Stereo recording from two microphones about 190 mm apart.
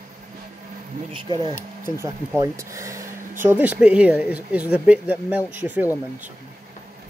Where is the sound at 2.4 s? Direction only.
15° right (ahead or behind).